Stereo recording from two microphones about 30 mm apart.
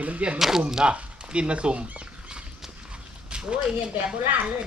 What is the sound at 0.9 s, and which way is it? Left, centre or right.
Speech, right.